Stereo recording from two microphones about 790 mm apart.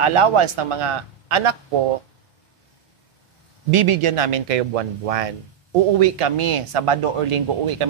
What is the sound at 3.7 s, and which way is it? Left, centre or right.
Speech, right.